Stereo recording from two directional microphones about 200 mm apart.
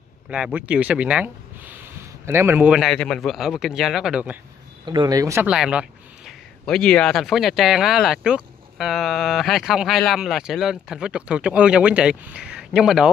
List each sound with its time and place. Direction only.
0.3 s speech: 5° right (ahead or behind)
4.8 s speech: 20° right (ahead or behind)
5.5 s speech: 5° right (ahead or behind)